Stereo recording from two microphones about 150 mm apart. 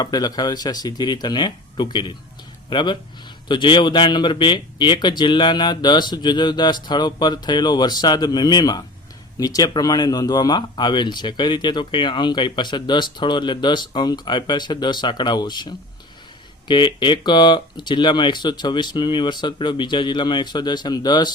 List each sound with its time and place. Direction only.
0.0 s speech: 25° left (ahead or behind)